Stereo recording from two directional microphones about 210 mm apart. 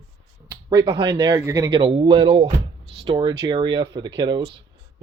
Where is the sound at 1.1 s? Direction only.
15° right (ahead or behind).